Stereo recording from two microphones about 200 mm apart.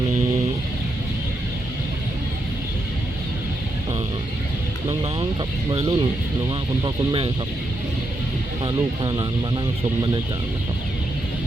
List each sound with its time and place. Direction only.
5.7 s speech: 25° right (ahead or behind)
8.6 s speech: 20° right (ahead or behind)